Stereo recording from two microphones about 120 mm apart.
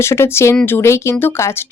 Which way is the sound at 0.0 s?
20° left (ahead or behind).